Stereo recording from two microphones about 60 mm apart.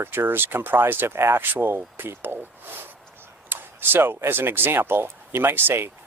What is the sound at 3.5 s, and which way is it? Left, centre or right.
Speech, right.